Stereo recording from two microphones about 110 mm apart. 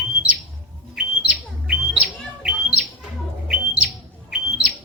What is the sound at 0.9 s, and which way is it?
Bird, 10° right (ahead or behind).